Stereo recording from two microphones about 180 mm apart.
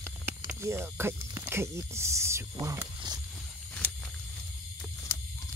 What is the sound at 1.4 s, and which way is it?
Speech, 15° right (ahead or behind).